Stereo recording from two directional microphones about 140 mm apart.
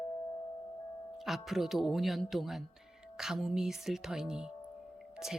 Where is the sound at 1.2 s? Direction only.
Centre (ahead or behind).